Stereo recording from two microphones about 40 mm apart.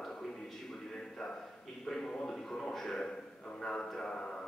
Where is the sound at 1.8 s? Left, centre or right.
Centre.